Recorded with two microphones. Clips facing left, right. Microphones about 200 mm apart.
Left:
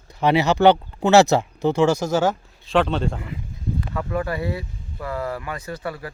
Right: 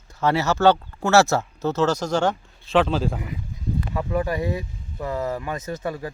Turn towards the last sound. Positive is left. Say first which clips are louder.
# right 2 dB
turn(degrees=-20)  # may be behind; listen again after turning